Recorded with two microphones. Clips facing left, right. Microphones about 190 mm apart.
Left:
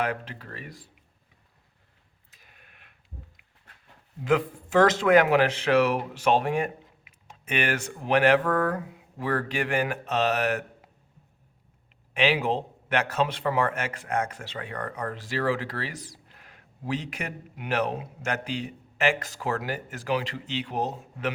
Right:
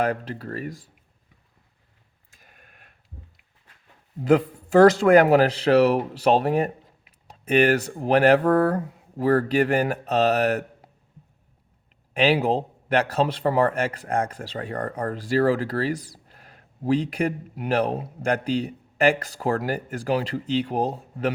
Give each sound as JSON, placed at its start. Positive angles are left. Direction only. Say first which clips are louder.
{"t": 0.0, "sound": "a man's voice", "louder": "right 5 dB", "side_deg": -40}
{"t": 2.3, "sound": "sheep", "louder": "right 3 dB", "side_deg": -45}
{"t": 4.2, "sound": "a man's voice", "louder": "right 5 dB", "side_deg": -40}
{"t": 12.1, "sound": "a man's voice", "louder": "right 4 dB", "side_deg": -40}